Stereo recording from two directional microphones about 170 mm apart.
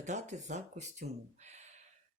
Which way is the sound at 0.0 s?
45° right (ahead or behind).